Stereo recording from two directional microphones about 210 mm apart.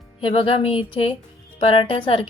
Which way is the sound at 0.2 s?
25° left (ahead or behind).